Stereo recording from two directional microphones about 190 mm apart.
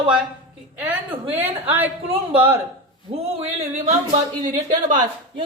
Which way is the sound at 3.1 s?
35° right (ahead or behind).